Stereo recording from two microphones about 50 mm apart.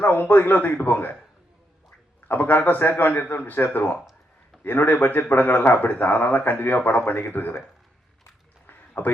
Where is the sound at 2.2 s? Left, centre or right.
Left.